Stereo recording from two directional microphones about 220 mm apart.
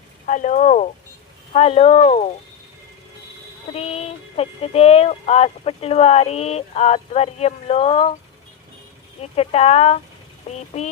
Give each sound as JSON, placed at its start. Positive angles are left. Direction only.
{"t": 0.3, "sound": "speech", "side_deg": 35}
{"t": 1.5, "sound": "music", "side_deg": 30}
{"t": 3.7, "sound": "music", "side_deg": 25}
{"t": 9.3, "sound": "music", "side_deg": 25}